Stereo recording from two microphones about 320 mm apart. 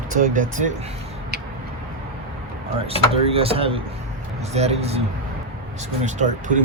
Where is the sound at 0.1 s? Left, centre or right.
Right.